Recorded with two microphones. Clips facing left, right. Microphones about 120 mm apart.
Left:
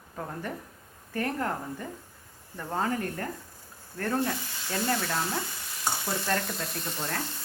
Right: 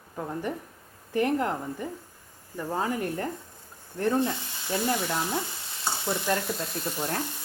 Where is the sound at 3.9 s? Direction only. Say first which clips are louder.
Right 3 dB; 20° right (ahead or behind).